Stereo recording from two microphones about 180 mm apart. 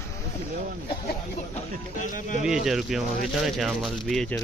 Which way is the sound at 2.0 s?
45° left (ahead or behind).